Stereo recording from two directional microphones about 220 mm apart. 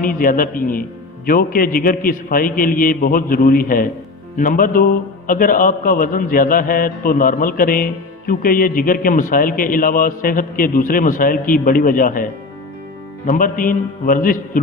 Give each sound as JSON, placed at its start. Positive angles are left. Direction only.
{"t": 0.0, "sound": "a man's voice", "side_deg": 40}
{"t": 13.3, "sound": "a man's voice", "side_deg": 40}